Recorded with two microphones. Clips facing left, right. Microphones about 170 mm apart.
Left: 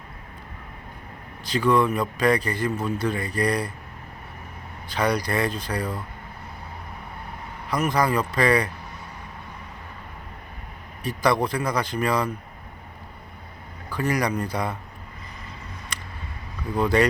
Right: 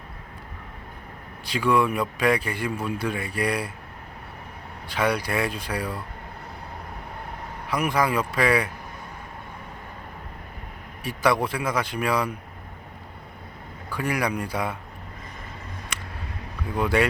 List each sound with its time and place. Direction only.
1.5 s a man's voice: 5° right (ahead or behind)
4.9 s a man's voice: 5° right (ahead or behind)
7.7 s a man's voice: 5° right (ahead or behind)
11.2 s a man's voice: 5° right (ahead or behind)
13.9 s a man's voice: 5° right (ahead or behind)
16.7 s a man's voice: 5° right (ahead or behind)